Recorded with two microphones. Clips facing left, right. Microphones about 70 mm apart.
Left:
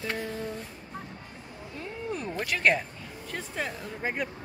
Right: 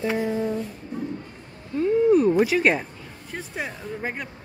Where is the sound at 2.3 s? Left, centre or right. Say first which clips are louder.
Right 6 dB; centre.